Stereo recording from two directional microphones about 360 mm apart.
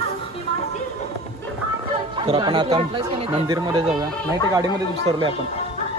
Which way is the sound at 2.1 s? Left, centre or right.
Centre.